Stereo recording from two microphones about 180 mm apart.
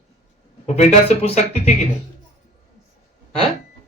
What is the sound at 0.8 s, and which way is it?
Speech, 40° left (ahead or behind).